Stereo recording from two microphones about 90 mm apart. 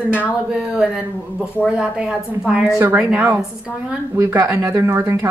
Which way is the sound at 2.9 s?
10° right (ahead or behind).